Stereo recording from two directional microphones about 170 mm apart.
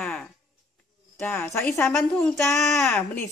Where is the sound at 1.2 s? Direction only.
10° left (ahead or behind).